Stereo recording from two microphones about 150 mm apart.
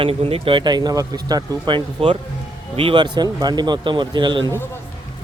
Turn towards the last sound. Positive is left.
turn(degrees=-30)  # may be behind; listen again after turning